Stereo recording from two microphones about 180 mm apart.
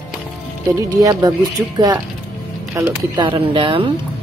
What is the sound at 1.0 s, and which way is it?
Speech, 20° right (ahead or behind).